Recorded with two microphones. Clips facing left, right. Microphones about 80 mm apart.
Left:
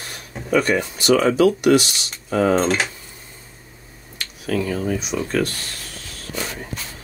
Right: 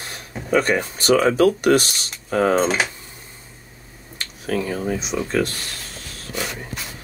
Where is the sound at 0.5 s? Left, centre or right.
Right.